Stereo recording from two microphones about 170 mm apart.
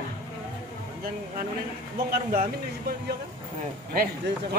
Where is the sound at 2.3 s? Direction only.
55° right (ahead or behind).